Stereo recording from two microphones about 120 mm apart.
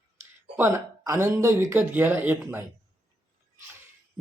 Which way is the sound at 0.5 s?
20° right (ahead or behind).